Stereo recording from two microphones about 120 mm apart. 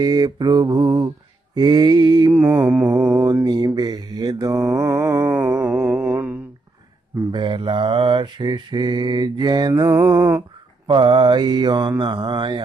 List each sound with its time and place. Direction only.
0.0 s mantra: 35° right (ahead or behind)
2.3 s mantra: 20° right (ahead or behind)
7.3 s mantra: 40° right (ahead or behind)
10.8 s mantra: 40° right (ahead or behind)